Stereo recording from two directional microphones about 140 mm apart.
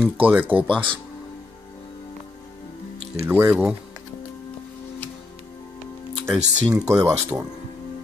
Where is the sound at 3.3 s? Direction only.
15° right (ahead or behind).